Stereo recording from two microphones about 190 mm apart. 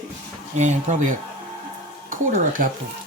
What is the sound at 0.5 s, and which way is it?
Speech, 40° right (ahead or behind).